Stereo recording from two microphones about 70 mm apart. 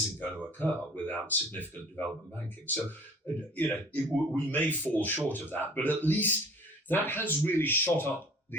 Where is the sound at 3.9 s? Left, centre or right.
Left.